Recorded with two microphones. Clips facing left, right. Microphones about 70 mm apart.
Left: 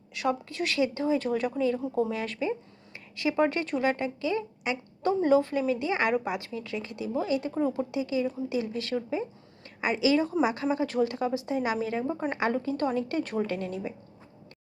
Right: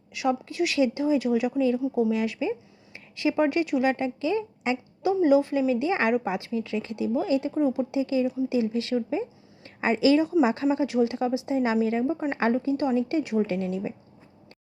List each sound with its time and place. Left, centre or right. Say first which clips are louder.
0.1 s speech: right 3 dB; centre
5.0 s a woman's voice: right 3 dB; centre
9.6 s a woman's voice: right 4 dB; right
12.0 s a woman's voice: right 4 dB; centre
12.3 s a woman's voice: right 3 dB; right
12.7 s speech: right 4 dB; centre
13.5 s a woman's voice: right 4 dB; right